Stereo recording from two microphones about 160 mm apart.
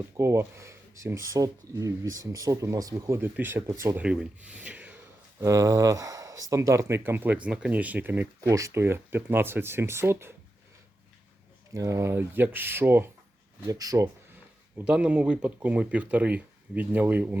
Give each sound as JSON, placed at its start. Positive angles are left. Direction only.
{"t": 0.2, "sound": "speech", "side_deg": -15}
{"t": 11.7, "sound": "speech", "side_deg": -20}
{"t": 14.8, "sound": "speech", "side_deg": -5}